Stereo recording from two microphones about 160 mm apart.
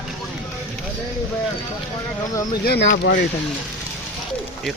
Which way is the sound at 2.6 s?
90° left.